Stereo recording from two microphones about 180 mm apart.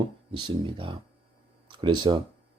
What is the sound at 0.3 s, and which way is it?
A man's voice, 25° right (ahead or behind).